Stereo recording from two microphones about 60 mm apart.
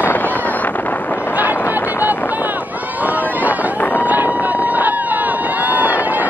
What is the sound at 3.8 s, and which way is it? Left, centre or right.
Run, left.